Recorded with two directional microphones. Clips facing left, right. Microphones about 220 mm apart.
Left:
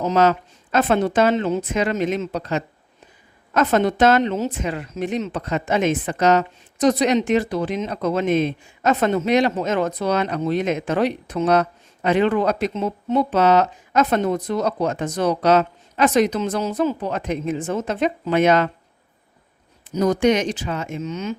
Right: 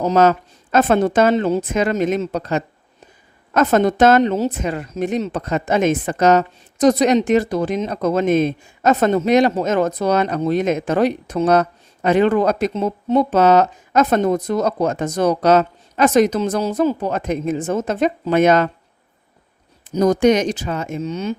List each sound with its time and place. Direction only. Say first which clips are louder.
0.0 s a woman's voice: right 3 dB; 45° right (ahead or behind)
20.0 s speech: right 3 dB; 40° right (ahead or behind)